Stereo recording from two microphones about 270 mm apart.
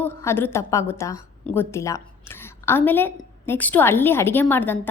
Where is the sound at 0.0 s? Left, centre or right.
Centre.